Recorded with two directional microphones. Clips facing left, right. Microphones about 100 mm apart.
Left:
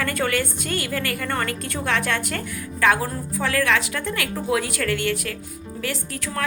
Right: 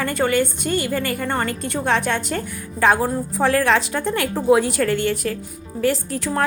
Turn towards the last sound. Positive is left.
turn(degrees=-30)  # may be behind; listen again after turning